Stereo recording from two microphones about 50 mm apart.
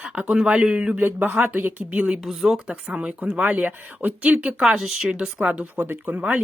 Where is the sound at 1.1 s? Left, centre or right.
Right.